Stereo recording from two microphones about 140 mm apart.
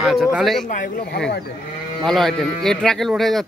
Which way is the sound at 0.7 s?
80° left.